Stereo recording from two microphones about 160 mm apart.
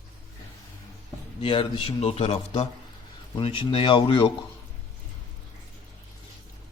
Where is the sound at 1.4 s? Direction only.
35° left (ahead or behind).